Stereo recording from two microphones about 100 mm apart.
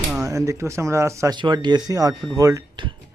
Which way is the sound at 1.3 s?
50° right (ahead or behind).